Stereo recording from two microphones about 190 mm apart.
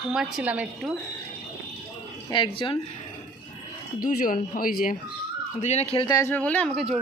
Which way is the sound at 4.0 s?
45° left (ahead or behind).